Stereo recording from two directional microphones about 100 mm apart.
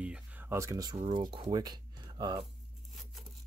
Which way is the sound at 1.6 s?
45° right (ahead or behind).